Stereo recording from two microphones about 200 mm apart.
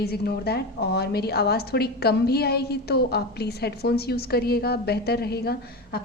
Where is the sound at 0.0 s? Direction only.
55° left (ahead or behind).